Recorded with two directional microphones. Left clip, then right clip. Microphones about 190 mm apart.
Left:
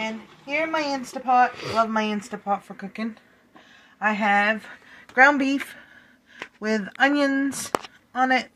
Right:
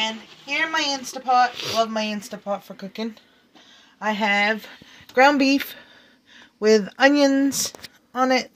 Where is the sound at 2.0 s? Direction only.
35° right (ahead or behind).